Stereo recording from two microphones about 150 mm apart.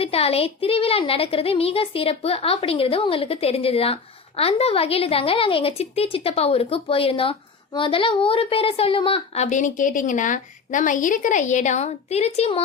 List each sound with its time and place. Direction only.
0.0 s a woman's voice: 40° left (ahead or behind)